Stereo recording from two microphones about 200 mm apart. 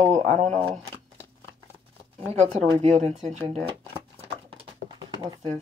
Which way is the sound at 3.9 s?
25° right (ahead or behind).